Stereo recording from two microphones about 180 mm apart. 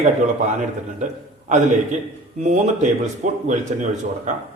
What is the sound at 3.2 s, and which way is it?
Speech, 45° right (ahead or behind).